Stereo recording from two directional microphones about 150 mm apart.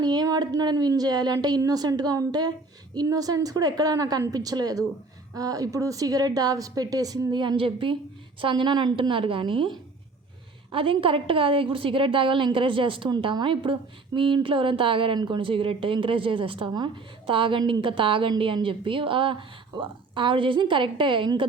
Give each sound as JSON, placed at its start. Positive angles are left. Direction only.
{"t": 0.0, "sound": "a woman's voice", "side_deg": -25}